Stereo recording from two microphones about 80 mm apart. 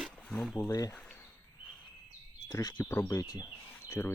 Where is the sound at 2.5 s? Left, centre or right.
Left.